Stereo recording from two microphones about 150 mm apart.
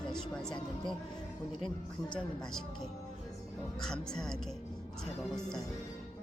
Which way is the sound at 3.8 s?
5° left (ahead or behind).